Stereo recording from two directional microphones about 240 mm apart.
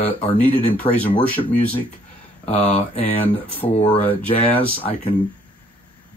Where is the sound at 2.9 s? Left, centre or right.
Left.